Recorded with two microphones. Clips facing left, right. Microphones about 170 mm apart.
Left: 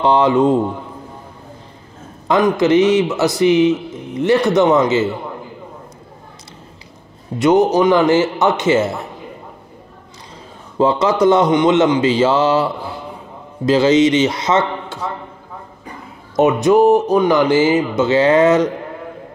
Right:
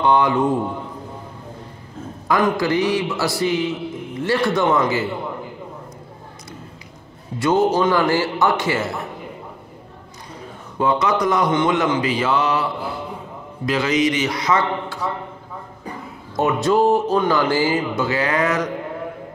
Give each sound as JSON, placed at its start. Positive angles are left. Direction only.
{"t": 0.0, "sound": "a man's voice", "side_deg": 25}
{"t": 2.2, "sound": "a man's voice", "side_deg": 20}
{"t": 7.3, "sound": "a man's voice", "side_deg": 20}
{"t": 10.8, "sound": "a man's voice", "side_deg": 25}
{"t": 13.7, "sound": "a man's voice", "side_deg": 25}
{"t": 16.3, "sound": "a man's voice", "side_deg": 20}